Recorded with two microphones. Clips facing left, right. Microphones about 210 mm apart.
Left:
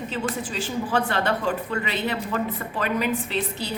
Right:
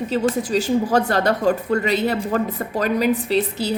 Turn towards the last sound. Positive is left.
turn(degrees=-40)  # may be behind; listen again after turning